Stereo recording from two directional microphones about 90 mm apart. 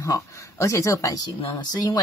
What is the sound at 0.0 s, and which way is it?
Speech, 35° left (ahead or behind).